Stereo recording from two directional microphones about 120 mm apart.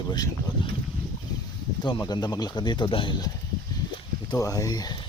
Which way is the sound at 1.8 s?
35° left (ahead or behind).